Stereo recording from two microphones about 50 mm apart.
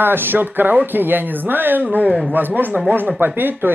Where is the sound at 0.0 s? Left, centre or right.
Right.